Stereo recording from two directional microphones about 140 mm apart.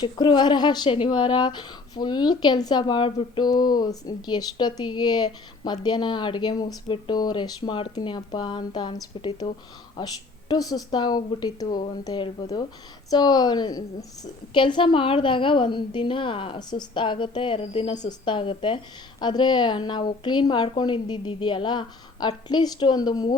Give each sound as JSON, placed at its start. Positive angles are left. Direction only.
{"t": 0.0, "sound": "a woman's voice", "side_deg": 35}